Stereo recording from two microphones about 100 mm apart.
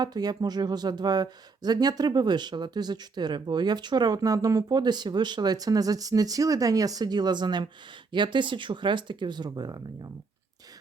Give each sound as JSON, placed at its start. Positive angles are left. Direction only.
{"t": 0.0, "sound": "speech", "side_deg": -45}